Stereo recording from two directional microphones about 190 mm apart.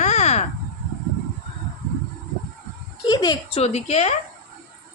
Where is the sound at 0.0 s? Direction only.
35° left (ahead or behind).